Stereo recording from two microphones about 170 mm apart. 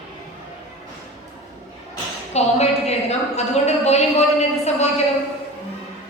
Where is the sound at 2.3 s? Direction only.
40° left (ahead or behind).